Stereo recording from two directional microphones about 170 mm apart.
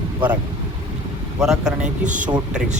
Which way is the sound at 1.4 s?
5° right (ahead or behind).